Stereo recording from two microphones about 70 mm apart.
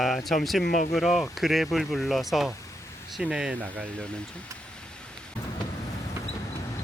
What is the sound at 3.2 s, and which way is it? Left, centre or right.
Speech, centre.